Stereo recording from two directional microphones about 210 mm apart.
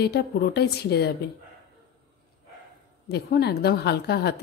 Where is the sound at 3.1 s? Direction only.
50° left (ahead or behind).